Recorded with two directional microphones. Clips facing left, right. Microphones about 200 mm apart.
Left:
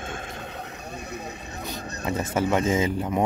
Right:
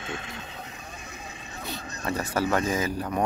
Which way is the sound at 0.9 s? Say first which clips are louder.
Left 7 dB; 65° left (ahead or behind).